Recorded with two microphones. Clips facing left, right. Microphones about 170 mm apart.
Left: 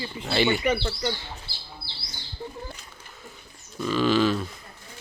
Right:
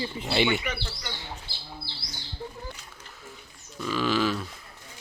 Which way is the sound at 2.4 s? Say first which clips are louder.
Left 2 dB; 10° right (ahead or behind).